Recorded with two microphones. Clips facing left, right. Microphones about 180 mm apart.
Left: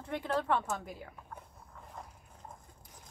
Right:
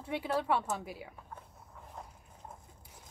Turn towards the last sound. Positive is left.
turn(degrees=-5)  # may be behind; listen again after turning